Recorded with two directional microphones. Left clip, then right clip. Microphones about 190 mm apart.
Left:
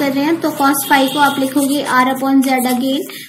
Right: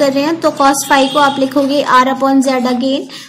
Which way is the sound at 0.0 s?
50° right (ahead or behind).